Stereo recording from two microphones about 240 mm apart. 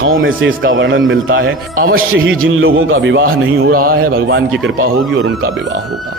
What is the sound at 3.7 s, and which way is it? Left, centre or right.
Speech, right.